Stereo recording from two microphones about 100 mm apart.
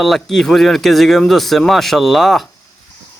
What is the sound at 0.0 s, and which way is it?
Speech, centre (ahead or behind).